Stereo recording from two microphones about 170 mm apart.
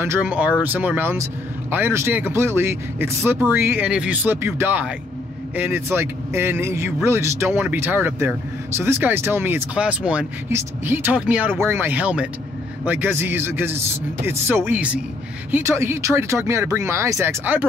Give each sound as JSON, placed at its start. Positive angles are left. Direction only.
{"t": 0.0, "sound": "speech", "side_deg": -10}